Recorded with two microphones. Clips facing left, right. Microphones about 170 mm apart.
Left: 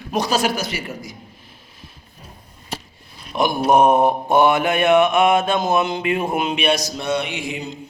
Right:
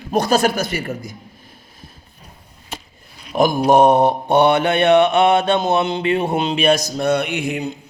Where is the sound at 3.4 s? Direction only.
40° right (ahead or behind); by 7.7 s 60° right (ahead or behind).